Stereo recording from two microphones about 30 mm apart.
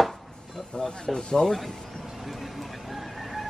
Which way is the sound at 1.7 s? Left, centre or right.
Left.